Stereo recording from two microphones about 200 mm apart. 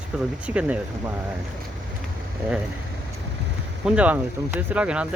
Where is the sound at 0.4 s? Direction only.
5° right (ahead or behind).